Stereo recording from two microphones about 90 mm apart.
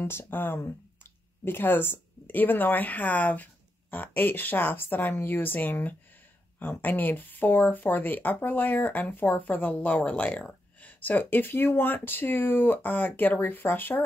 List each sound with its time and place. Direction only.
0.0 s speech: 25° left (ahead or behind)